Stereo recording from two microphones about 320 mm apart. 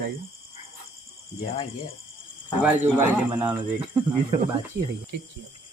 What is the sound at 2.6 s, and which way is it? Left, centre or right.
Speech, centre.